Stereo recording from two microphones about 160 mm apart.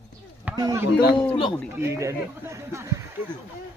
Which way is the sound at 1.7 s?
15° right (ahead or behind).